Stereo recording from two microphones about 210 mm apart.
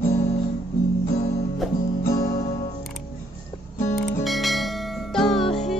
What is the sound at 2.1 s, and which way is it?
Guitar, 40° left (ahead or behind).